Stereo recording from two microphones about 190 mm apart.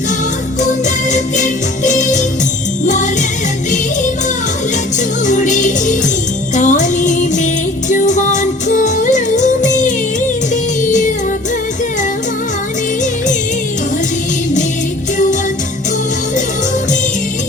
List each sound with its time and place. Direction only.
0.6 s music: 40° left (ahead or behind)
5.2 s music: 40° left (ahead or behind)